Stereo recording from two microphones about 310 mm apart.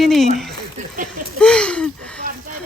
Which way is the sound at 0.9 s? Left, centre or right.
Right.